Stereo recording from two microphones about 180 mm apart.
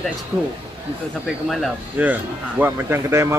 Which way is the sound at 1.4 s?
Centre (ahead or behind).